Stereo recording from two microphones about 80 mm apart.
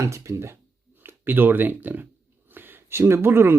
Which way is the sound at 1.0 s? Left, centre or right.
Right.